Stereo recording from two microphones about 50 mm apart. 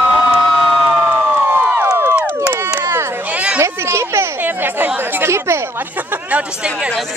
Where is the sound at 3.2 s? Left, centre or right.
Right.